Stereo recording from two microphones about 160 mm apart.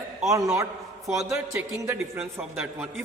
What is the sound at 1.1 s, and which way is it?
Speech, 15° right (ahead or behind).